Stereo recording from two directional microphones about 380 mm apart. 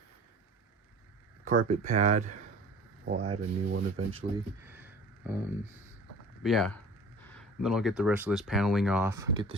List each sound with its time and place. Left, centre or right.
1.5 s speech: centre